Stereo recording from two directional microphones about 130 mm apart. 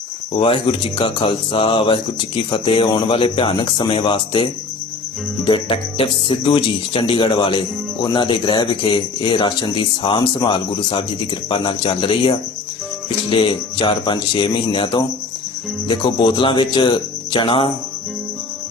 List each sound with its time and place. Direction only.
0.3 s speech: 40° left (ahead or behind)
5.5 s speech: 40° left (ahead or behind)